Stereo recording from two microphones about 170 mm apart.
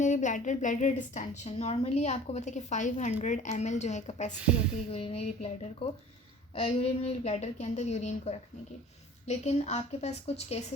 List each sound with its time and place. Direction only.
0.0 s a woman's voice: 45° left (ahead or behind)